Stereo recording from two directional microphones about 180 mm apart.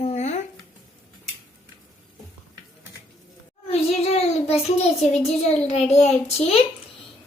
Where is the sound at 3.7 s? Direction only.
35° left (ahead or behind).